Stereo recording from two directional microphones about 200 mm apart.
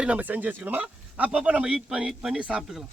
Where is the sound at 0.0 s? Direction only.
5° right (ahead or behind).